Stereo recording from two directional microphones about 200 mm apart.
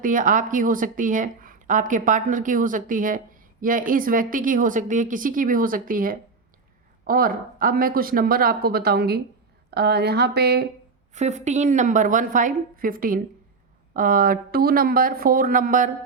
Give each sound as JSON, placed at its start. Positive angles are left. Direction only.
{"t": 0.0, "sound": "a woman's voice", "side_deg": -40}
{"t": 11.1, "sound": "a woman's voice", "side_deg": -35}